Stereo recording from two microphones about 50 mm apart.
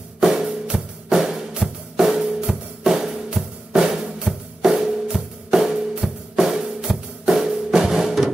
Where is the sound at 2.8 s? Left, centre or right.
Centre.